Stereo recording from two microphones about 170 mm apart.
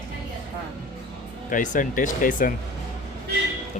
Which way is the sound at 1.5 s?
50° left (ahead or behind).